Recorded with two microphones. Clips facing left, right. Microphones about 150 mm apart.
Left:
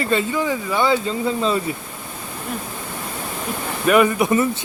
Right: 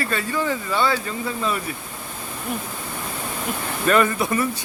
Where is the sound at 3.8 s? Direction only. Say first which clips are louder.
Left 4 dB; 15° left (ahead or behind).